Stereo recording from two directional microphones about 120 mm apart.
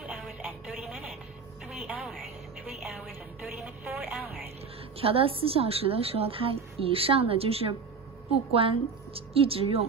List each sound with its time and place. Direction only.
1.7 s music: 10° right (ahead or behind)
4.9 s a woman's voice: 50° right (ahead or behind)